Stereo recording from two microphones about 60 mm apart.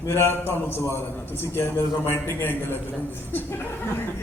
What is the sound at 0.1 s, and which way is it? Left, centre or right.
Speech, left.